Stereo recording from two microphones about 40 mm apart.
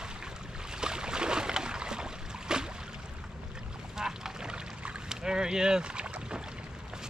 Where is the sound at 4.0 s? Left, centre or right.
Centre.